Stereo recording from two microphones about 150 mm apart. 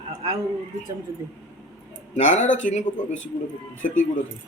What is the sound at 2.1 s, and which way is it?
Speech, 55° left (ahead or behind).